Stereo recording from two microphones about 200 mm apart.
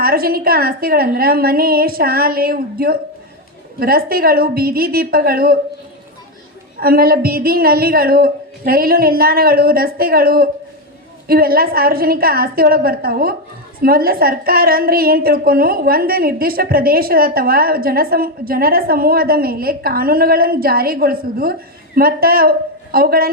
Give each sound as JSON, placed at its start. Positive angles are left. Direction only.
{"t": 0.0, "sound": "a woman's voice", "side_deg": -50}
{"t": 6.7, "sound": "a woman's voice", "side_deg": -50}